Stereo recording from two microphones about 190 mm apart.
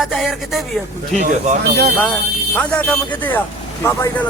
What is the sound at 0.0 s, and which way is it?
Speech, centre (ahead or behind).